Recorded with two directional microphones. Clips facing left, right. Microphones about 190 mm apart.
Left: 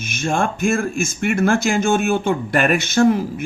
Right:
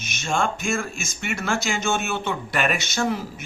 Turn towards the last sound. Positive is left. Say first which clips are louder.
# left 10 dB
turn(degrees=55)  # may be behind; listen again after turning